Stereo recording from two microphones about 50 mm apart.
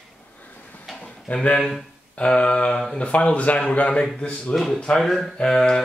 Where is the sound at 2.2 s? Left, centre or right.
Left.